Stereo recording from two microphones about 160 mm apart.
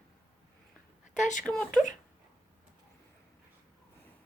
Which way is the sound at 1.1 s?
50° left (ahead or behind).